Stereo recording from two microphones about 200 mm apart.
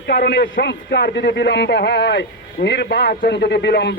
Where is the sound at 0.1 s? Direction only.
55° left (ahead or behind).